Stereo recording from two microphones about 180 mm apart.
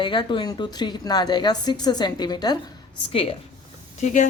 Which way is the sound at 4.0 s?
40° left (ahead or behind).